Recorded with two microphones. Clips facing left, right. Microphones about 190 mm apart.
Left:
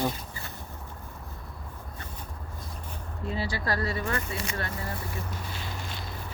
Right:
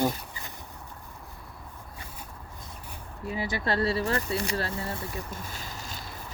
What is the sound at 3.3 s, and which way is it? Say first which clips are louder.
Speech: right 2 dB; 20° right (ahead or behind).